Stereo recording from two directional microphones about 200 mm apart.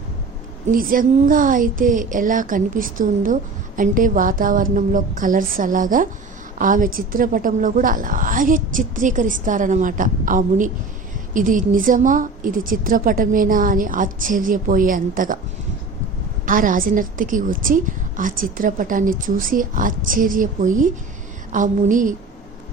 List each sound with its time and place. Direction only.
0.7 s a woman's voice: 45° right (ahead or behind)
16.5 s a woman's voice: 45° right (ahead or behind)